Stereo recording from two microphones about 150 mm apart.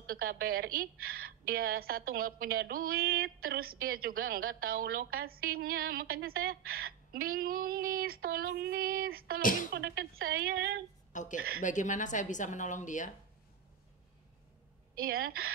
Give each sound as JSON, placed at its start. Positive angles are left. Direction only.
{"t": 0.0, "sound": "a woman's voice", "side_deg": -80}
{"t": 9.4, "sound": "a woman's voice", "side_deg": 65}
{"t": 9.7, "sound": "speech", "side_deg": -90}
{"t": 11.1, "sound": "a woman's voice", "side_deg": 55}
{"t": 15.0, "sound": "a woman's voice", "side_deg": -85}